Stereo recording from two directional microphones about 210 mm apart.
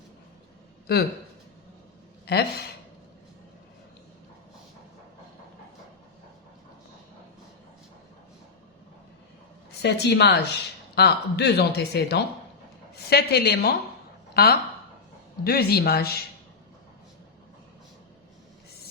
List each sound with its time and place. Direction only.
0.9 s speech: 50° left (ahead or behind)
2.2 s speech: 50° left (ahead or behind)
9.8 s a woman's voice: 55° left (ahead or behind)